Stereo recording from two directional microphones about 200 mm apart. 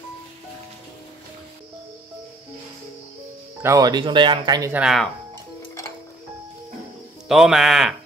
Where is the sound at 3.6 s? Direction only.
15° right (ahead or behind).